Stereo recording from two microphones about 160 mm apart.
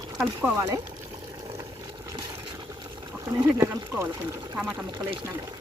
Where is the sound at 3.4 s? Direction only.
15° right (ahead or behind).